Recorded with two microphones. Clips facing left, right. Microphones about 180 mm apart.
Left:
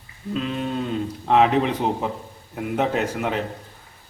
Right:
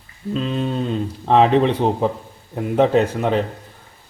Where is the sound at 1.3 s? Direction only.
35° right (ahead or behind).